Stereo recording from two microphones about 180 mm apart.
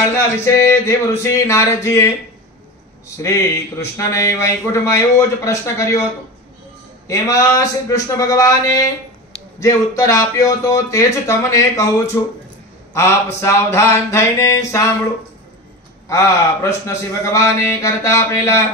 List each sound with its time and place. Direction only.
0.7 s speech: 15° left (ahead or behind)
3.2 s speech: 15° left (ahead or behind)
7.1 s speech: 15° left (ahead or behind)
16.1 s speech: 15° left (ahead or behind)